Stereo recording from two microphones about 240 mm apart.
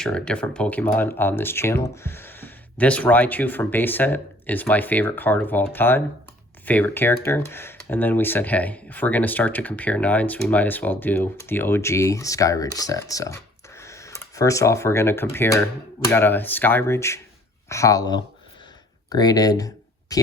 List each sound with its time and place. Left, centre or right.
0.0 s speech: centre